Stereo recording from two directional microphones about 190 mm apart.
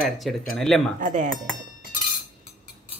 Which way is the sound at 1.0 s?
45° right (ahead or behind).